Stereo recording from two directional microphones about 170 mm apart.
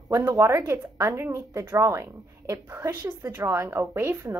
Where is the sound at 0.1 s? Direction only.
20° right (ahead or behind).